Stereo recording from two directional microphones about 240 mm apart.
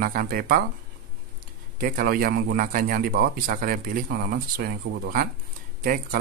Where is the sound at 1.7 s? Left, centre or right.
Right.